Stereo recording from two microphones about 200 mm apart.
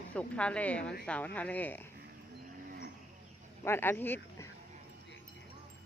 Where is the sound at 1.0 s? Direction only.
5° left (ahead or behind).